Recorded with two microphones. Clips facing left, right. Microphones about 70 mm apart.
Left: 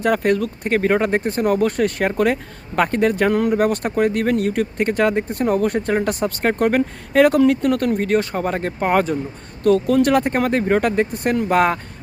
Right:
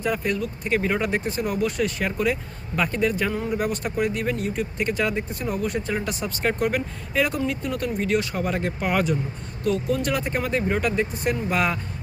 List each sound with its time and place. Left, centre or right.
0.0 s speech: left
9.6 s speech: left